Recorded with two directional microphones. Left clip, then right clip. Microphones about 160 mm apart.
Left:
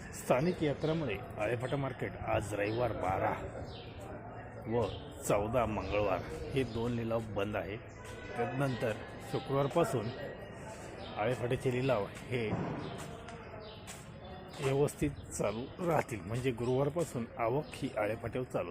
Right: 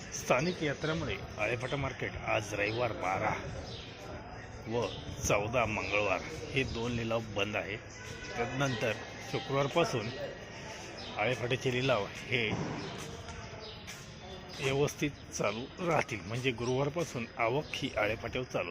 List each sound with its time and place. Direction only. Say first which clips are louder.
0.4 s speech: even; 25° left (ahead or behind)
5.3 s speech: right 1 dB; 20° left (ahead or behind)
6.9 s speech: right 1 dB; 5° left (ahead or behind)
8.6 s speech: right 2 dB; centre (ahead or behind); by 10.0 s 15° left (ahead or behind)
11.2 s speech: right 2 dB; 10° left (ahead or behind)
14.6 s speech: right 1 dB; 10° left (ahead or behind)